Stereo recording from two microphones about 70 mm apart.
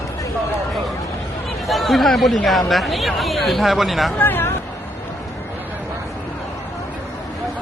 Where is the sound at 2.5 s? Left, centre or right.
Centre.